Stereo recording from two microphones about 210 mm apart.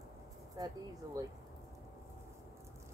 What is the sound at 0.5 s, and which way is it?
Speech, 15° right (ahead or behind).